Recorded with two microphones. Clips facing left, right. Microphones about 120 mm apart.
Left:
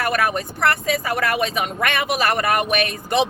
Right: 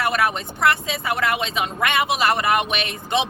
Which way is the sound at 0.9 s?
25° right (ahead or behind).